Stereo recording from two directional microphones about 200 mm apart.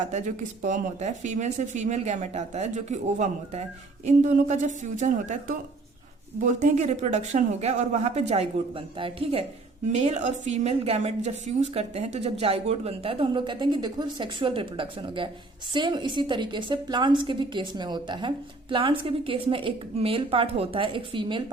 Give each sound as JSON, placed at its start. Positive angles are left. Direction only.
{"t": 0.1, "sound": "a woman's voice", "side_deg": -35}